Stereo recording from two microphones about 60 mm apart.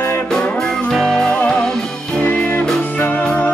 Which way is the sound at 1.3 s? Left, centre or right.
Centre.